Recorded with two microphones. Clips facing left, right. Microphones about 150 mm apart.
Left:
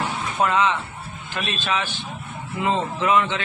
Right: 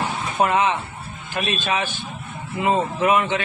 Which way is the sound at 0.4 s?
15° right (ahead or behind).